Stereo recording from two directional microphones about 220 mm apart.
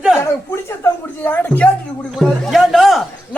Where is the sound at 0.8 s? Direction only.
10° left (ahead or behind).